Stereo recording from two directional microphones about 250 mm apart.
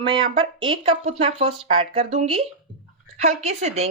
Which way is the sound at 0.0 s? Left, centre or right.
Centre.